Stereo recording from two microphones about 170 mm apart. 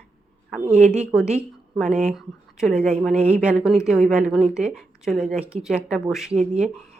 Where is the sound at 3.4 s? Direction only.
5° right (ahead or behind).